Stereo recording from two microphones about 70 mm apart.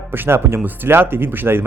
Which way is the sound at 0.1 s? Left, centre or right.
Right.